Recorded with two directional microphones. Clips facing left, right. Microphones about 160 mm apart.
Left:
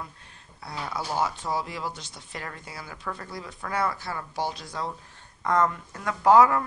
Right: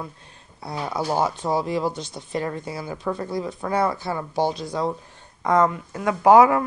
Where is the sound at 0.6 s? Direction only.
20° right (ahead or behind).